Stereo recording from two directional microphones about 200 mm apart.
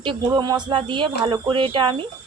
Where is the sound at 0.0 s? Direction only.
20° right (ahead or behind).